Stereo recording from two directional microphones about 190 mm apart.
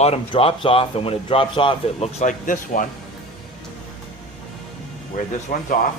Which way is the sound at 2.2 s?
45° left (ahead or behind).